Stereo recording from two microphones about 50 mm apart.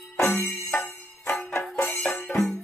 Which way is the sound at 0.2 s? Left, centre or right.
Left.